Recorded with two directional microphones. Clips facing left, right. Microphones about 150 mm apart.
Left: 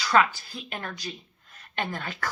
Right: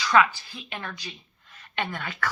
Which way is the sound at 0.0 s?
40° left (ahead or behind).